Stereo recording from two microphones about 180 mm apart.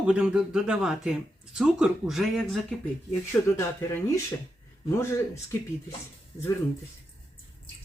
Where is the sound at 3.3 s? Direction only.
10° left (ahead or behind).